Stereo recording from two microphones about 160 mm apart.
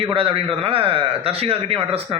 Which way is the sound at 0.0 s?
35° right (ahead or behind).